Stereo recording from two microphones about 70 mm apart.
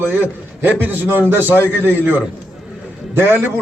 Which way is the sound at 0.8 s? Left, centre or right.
Right.